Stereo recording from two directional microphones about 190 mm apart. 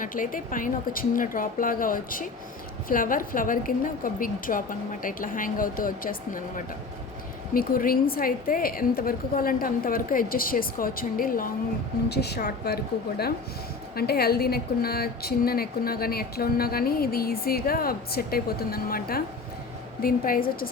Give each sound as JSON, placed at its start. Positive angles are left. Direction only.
{"t": 0.0, "sound": "a woman's voice", "side_deg": 45}
{"t": 7.5, "sound": "a woman's voice", "side_deg": 50}
{"t": 12.0, "sound": "a woman's voice", "side_deg": 60}